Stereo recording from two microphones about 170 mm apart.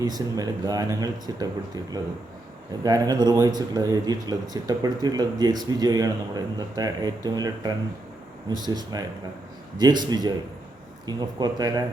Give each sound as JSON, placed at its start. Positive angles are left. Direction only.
{"t": 0.0, "sound": "speech", "side_deg": -20}